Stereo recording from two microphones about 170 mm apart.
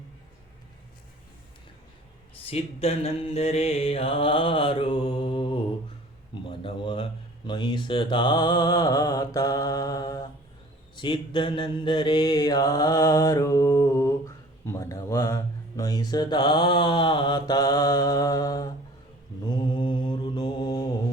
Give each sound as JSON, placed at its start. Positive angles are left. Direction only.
{"t": 2.5, "sound": "mantra", "side_deg": 35}